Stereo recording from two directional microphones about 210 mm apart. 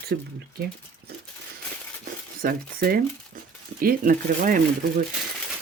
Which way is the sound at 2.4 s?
45° right (ahead or behind).